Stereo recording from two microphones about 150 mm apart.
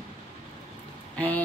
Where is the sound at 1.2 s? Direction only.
10° left (ahead or behind).